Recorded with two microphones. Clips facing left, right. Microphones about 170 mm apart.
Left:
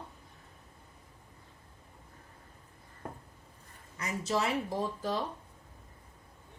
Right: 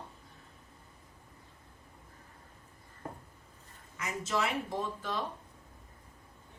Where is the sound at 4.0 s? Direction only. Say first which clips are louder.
Left 1 dB; 35° left (ahead or behind).